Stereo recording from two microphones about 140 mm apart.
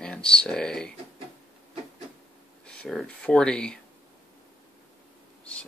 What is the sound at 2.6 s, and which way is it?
Speech, 5° left (ahead or behind).